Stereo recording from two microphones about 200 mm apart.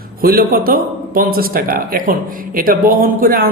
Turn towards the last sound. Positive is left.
turn(degrees=-45)  # may be behind; listen again after turning